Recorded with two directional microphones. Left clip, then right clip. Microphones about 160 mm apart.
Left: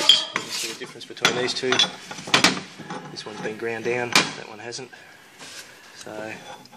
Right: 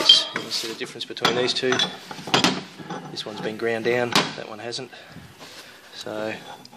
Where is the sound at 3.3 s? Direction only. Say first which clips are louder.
Right 3 dB; 20° right (ahead or behind).